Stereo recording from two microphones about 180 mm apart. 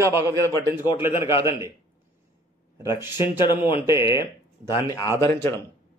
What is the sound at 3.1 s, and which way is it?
Speech, 30° left (ahead or behind).